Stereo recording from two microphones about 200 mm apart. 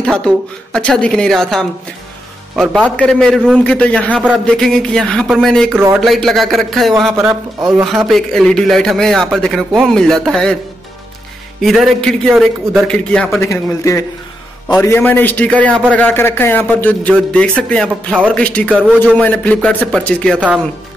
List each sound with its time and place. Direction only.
0.0 s a man's voice: 5° left (ahead or behind)
7.2 s speech: 10° right (ahead or behind)
8.1 s a man's voice: centre (ahead or behind)
11.6 s a man's voice: centre (ahead or behind)
13.5 s a man's voice: 15° left (ahead or behind)